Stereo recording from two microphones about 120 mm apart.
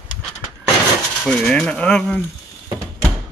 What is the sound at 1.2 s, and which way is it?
Speech, 5° left (ahead or behind).